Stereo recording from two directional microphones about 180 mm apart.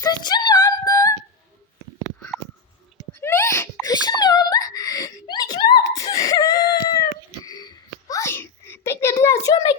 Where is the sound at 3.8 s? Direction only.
20° left (ahead or behind).